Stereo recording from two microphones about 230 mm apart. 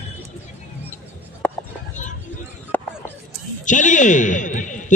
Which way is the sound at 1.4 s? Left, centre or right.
Centre.